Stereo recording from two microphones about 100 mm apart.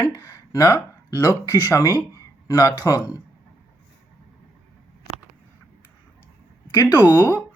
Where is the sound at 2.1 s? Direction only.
35° left (ahead or behind).